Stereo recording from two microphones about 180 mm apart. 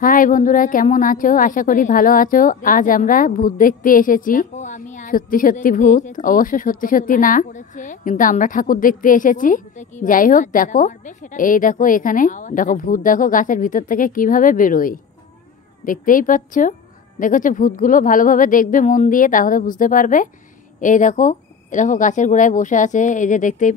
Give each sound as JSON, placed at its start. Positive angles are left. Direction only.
{"t": 0.0, "sound": "a woman's voice", "side_deg": 50}